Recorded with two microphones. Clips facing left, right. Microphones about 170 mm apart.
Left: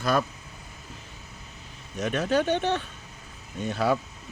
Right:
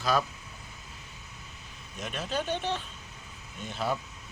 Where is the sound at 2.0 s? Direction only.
65° left (ahead or behind).